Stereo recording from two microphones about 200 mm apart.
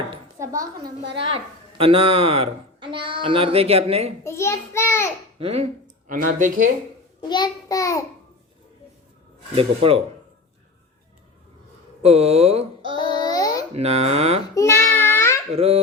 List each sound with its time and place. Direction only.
0.3 s a sound: 15° right (ahead or behind)
1.8 s speech: 30° right (ahead or behind)
4.2 s a child's voice: 15° left (ahead or behind)
5.4 s speech: 30° right (ahead or behind)
7.3 s a child's voice: 20° left (ahead or behind)
9.6 s speech: 30° right (ahead or behind)
12.0 s speech: 30° right (ahead or behind)
13.0 s child singing: 20° left (ahead or behind)
13.7 s speech: 30° right (ahead or behind)
14.5 s child singing: 15° left (ahead or behind)
15.5 s speech: 30° right (ahead or behind)